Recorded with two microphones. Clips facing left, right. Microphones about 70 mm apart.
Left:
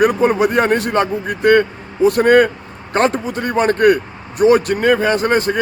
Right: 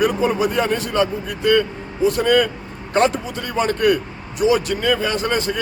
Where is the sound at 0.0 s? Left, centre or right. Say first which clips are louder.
Left 5 dB; left.